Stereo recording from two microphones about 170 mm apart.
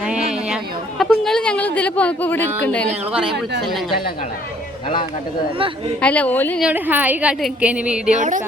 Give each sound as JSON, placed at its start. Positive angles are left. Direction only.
{"t": 0.0, "sound": "a sound", "side_deg": -5}
{"t": 3.7, "sound": "speech", "side_deg": 0}
{"t": 6.0, "sound": "a woman's voice", "side_deg": 10}
{"t": 6.6, "sound": "a woman's voice", "side_deg": -10}
{"t": 8.1, "sound": "a woman's voice", "side_deg": -50}